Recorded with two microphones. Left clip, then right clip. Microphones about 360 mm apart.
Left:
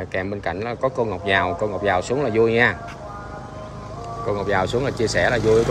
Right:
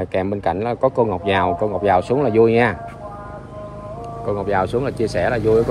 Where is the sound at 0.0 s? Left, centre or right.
Centre.